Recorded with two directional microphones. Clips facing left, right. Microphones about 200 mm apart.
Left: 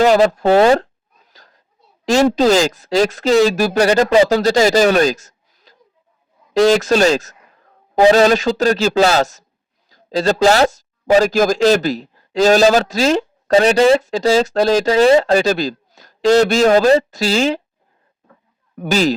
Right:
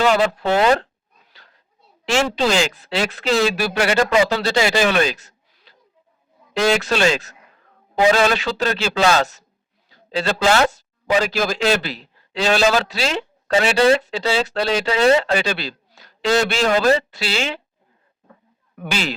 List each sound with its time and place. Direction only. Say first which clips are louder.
0.0 s speech: left 6 dB; 40° left (ahead or behind)
1.3 s a sound: left 4 dB; 40° left (ahead or behind)
2.0 s speech: left 7 dB; 40° left (ahead or behind)
18.8 s speech: left 9 dB; 40° left (ahead or behind)